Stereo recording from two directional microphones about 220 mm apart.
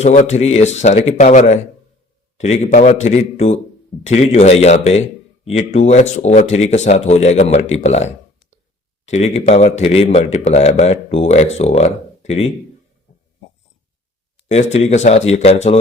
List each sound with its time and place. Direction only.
0.0 s a man's voice: 30° left (ahead or behind)
14.4 s a man's voice: 30° left (ahead or behind)